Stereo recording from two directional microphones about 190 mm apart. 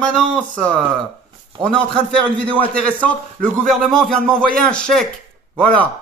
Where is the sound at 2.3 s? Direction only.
5° left (ahead or behind).